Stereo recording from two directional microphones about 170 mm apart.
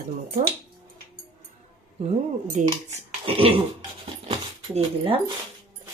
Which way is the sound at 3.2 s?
35° right (ahead or behind).